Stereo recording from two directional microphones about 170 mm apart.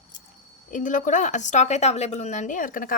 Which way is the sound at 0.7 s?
50° left (ahead or behind).